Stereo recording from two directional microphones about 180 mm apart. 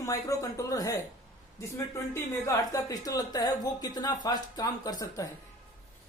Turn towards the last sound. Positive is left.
turn(degrees=20)  # may be behind; listen again after turning